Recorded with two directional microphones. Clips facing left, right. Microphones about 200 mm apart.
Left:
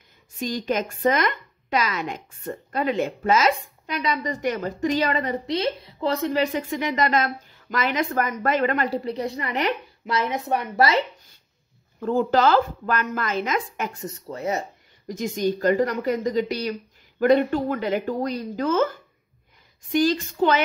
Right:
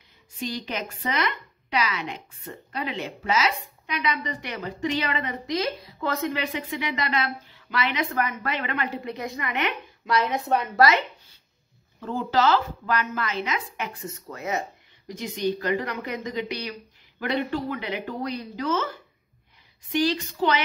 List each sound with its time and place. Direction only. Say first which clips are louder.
0.4 s a woman's voice: left 6 dB; 45° left (ahead or behind)
10.8 s a woman's voice: even; 30° left (ahead or behind)
12.0 s a woman's voice: left 4 dB; 50° left (ahead or behind); by 14.6 s 35° left (ahead or behind)
15.0 s a woman's voice: left 3 dB; 45° left (ahead or behind)